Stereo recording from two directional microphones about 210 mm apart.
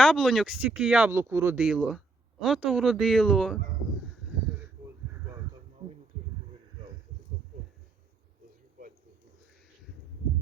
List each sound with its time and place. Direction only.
0.0 s speech: centre (ahead or behind)